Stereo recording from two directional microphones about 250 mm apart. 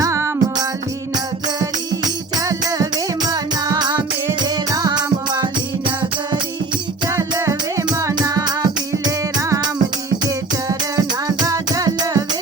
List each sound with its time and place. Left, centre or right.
0.0 s music: centre
2.4 s music: centre
7.1 s music: centre